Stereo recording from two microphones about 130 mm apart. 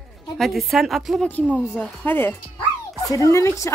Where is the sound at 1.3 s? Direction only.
10° left (ahead or behind).